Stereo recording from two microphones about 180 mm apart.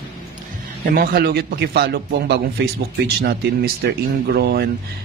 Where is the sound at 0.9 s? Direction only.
55° right (ahead or behind).